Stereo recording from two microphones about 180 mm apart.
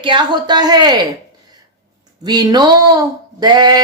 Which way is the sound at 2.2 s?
20° right (ahead or behind).